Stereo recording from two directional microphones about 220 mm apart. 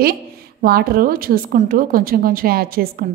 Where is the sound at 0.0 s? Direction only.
40° right (ahead or behind).